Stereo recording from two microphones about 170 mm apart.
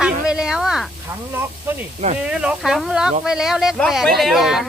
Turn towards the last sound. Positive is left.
turn(degrees=0)  # may be behind; listen again after turning